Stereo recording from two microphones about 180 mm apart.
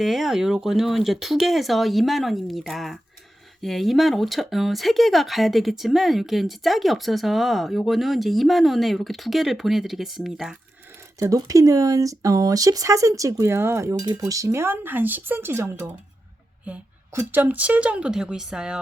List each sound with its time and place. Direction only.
0.0 s speech: centre (ahead or behind)
11.2 s speech: 20° right (ahead or behind); by 18.8 s 5° right (ahead or behind)